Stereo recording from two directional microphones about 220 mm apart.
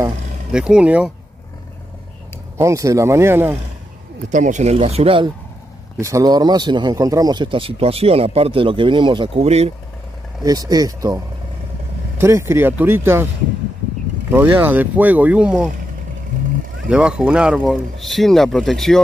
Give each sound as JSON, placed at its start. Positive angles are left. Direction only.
{"t": 0.5, "sound": "speech", "side_deg": -5}
{"t": 2.5, "sound": "speech", "side_deg": -15}
{"t": 4.3, "sound": "speech", "side_deg": -35}
{"t": 10.4, "sound": "speech", "side_deg": -15}
{"t": 14.3, "sound": "speech", "side_deg": -10}
{"t": 16.9, "sound": "speech", "side_deg": -5}